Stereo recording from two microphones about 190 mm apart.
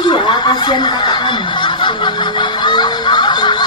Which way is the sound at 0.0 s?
25° left (ahead or behind).